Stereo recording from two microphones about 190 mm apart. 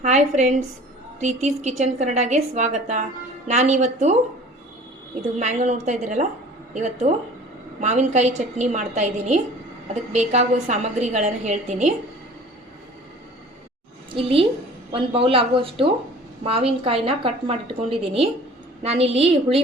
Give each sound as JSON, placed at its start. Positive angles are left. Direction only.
{"t": 0.0, "sound": "a woman's voice", "side_deg": -40}
{"t": 5.4, "sound": "a woman's voice", "side_deg": -40}
{"t": 14.2, "sound": "a woman's voice", "side_deg": -30}